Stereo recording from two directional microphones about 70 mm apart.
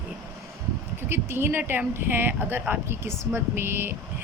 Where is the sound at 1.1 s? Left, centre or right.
Right.